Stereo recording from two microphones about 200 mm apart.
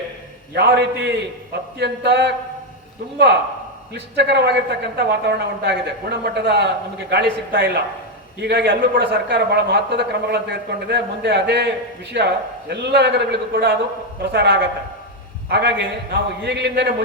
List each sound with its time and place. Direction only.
0.5 s a man's voice: 55° right (ahead or behind)
3.9 s a man's voice: 60° right (ahead or behind)